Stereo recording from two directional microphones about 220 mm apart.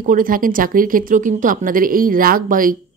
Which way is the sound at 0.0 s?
40° right (ahead or behind).